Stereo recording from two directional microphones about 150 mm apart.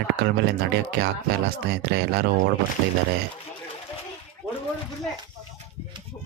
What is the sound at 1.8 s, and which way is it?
Speech, 90° right.